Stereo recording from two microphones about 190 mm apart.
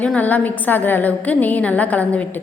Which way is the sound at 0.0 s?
5° left (ahead or behind).